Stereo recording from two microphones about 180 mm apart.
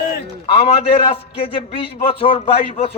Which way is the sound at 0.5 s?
35° left (ahead or behind).